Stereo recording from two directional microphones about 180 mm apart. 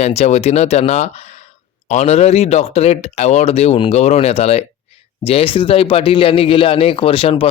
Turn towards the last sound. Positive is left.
turn(degrees=30)  # may be behind; listen again after turning